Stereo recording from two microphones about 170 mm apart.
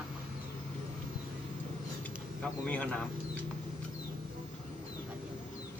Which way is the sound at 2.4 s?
5° left (ahead or behind).